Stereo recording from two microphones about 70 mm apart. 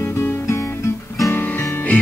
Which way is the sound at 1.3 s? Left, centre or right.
Left.